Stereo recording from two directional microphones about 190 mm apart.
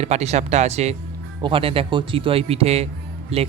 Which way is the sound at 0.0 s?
35° right (ahead or behind).